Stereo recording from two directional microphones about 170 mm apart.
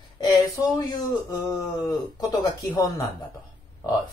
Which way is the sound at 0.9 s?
25° left (ahead or behind).